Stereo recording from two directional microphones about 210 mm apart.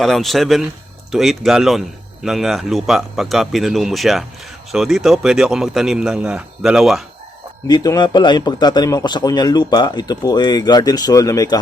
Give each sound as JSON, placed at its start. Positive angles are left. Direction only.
{"t": 0.0, "sound": "speech", "side_deg": 0}
{"t": 7.7, "sound": "a man's voice", "side_deg": 20}